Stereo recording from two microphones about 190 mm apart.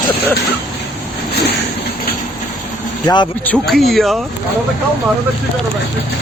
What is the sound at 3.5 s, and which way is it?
Speech, centre (ahead or behind).